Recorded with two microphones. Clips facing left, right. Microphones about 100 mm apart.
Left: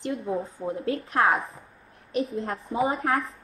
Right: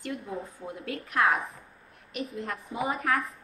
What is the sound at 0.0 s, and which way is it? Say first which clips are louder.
A woman's voice: left 6 dB; 25° left (ahead or behind).